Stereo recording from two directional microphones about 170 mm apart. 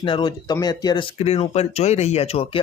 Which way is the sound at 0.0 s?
25° left (ahead or behind).